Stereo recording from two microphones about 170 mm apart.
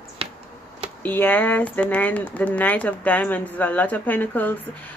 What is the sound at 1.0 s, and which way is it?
Speech, 10° left (ahead or behind).